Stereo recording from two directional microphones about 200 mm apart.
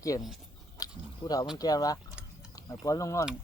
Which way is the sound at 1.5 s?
20° left (ahead or behind).